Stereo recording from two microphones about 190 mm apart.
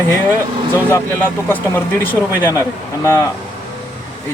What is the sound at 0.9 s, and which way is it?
Speech, 10° left (ahead or behind).